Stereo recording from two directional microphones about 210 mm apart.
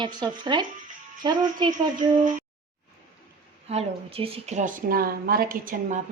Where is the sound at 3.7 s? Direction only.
25° right (ahead or behind).